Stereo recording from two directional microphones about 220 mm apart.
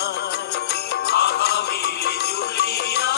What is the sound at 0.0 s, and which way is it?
Music, 50° left (ahead or behind).